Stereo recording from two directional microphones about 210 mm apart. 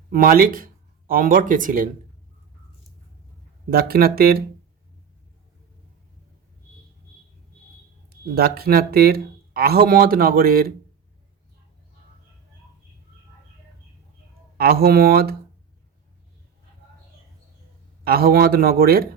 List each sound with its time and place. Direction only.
0.1 s speech: 40° right (ahead or behind)
3.7 s speech: 45° right (ahead or behind)
8.4 s speech: 45° right (ahead or behind)
14.6 s speech: 45° right (ahead or behind)
18.0 s speech: 45° right (ahead or behind)